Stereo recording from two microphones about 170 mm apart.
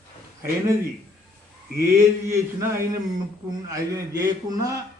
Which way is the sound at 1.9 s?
15° right (ahead or behind).